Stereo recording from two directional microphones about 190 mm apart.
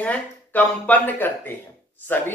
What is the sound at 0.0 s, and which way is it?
Speech, 10° left (ahead or behind).